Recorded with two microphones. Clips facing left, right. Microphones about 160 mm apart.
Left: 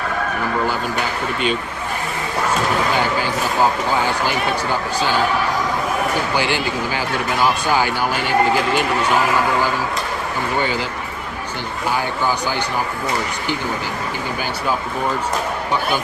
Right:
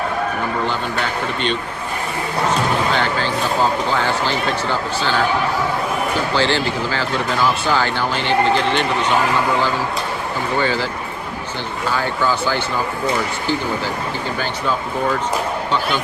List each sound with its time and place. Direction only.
2.9 s speech: 10° left (ahead or behind)
6.3 s speech: 15° left (ahead or behind)
10.6 s speech: 15° left (ahead or behind)
11.9 s speech: 15° left (ahead or behind)